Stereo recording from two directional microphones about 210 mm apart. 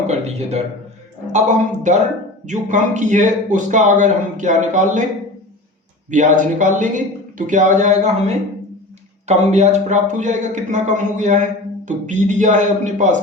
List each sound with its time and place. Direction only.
0.1 s a sound: 30° right (ahead or behind)
1.3 s a man's voice: 35° right (ahead or behind)
6.1 s a man's voice: 35° right (ahead or behind)
9.2 s a man's voice: 35° right (ahead or behind)